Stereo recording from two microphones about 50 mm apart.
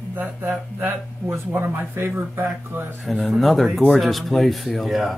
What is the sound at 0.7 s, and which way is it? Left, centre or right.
Speech, right.